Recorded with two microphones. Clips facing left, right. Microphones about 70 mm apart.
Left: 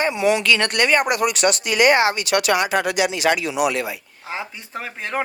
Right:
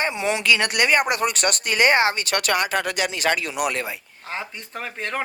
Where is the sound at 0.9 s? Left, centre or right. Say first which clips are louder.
Left 3 dB; right.